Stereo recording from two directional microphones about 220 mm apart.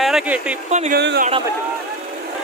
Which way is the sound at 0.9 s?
50° right (ahead or behind).